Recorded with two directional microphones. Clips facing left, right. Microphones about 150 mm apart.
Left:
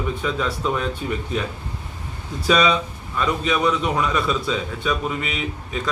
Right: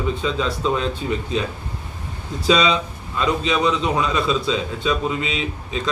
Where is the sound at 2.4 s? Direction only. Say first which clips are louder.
Right 1 dB; 20° right (ahead or behind).